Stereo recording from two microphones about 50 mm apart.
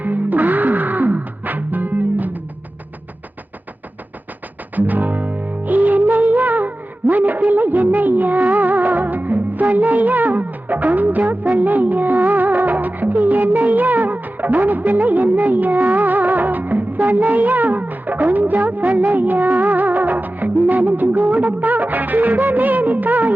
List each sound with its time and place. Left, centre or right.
0.0 s music: right
4.7 s music: right